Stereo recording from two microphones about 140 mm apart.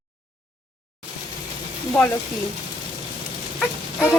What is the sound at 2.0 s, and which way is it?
Speech, 5° left (ahead or behind).